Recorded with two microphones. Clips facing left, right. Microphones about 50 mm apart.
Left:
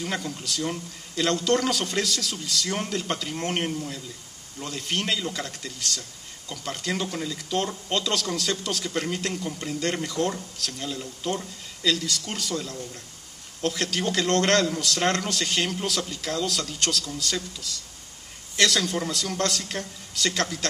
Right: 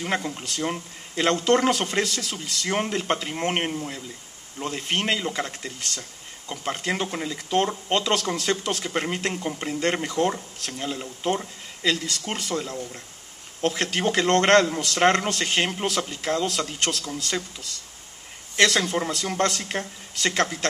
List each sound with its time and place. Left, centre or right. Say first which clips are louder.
0.0 s speech: right 3 dB; right